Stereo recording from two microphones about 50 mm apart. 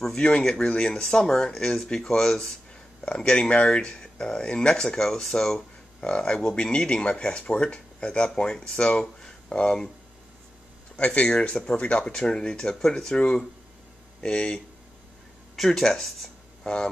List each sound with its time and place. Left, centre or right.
0.5 s speech: centre
11.1 s speech: centre
15.5 s speech: centre